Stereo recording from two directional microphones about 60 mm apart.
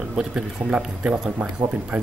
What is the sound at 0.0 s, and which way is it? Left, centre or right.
Speech, centre.